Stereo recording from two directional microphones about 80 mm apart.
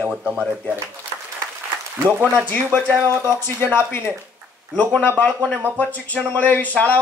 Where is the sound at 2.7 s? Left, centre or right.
Left.